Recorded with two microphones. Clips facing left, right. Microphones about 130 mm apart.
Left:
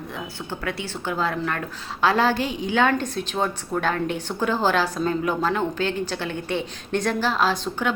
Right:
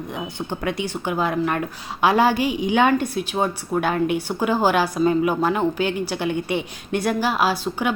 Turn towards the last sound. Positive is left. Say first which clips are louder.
# right 2 dB
turn(degrees=-10)  # may be behind; listen again after turning